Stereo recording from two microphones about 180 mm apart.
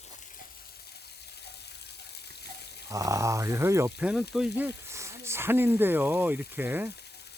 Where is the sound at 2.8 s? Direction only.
20° right (ahead or behind).